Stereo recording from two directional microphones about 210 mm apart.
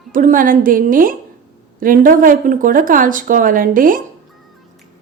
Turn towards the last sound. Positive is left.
turn(degrees=-40)  # may be behind; listen again after turning